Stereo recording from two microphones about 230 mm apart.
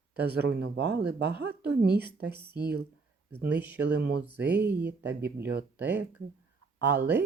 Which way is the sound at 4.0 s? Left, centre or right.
Right.